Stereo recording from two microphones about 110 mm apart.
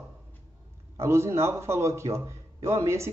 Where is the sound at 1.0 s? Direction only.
25° right (ahead or behind).